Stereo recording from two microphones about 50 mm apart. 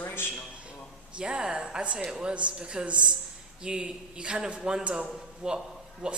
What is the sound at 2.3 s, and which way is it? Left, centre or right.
A man's voice, right.